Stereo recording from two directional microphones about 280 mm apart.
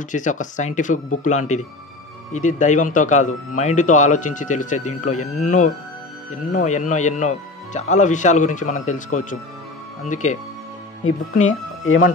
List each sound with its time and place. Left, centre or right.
0.1 s speech: left
6.5 s speech: left
11.3 s speech: left